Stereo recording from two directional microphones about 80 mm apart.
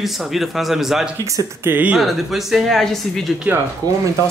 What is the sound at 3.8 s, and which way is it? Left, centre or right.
Speech, right.